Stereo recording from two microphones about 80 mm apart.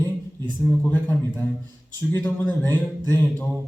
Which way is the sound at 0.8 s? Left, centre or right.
Left.